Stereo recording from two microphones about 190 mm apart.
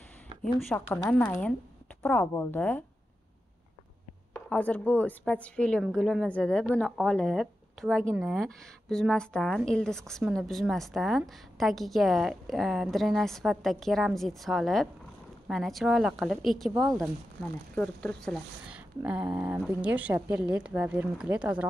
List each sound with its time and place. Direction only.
0.4 s a woman's voice: centre (ahead or behind)
4.3 s a woman's voice: 5° left (ahead or behind)
17.7 s a woman's voice: 5° left (ahead or behind)
19.0 s a woman's voice: 5° right (ahead or behind)